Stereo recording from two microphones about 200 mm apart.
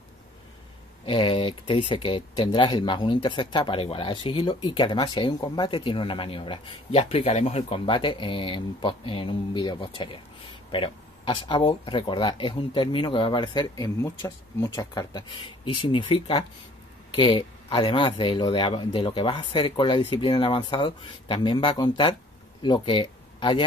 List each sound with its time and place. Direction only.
1.0 s speech: 25° left (ahead or behind)